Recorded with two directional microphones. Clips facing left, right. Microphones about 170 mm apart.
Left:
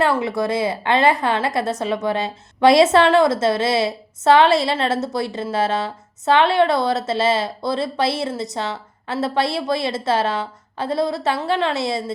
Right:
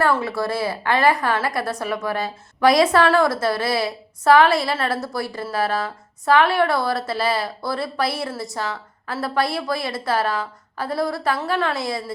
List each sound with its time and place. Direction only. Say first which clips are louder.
0.0 s a woman's voice: left 2 dB; 20° left (ahead or behind)